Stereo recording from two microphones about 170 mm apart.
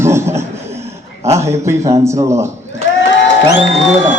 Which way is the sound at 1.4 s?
15° right (ahead or behind).